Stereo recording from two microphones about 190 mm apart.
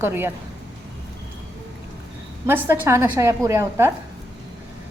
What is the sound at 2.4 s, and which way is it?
A woman's voice, 10° right (ahead or behind).